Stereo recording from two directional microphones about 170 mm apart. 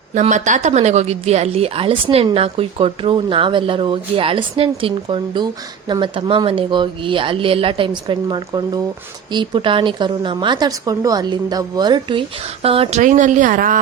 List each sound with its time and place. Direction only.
0.1 s a woman's voice: 45° right (ahead or behind)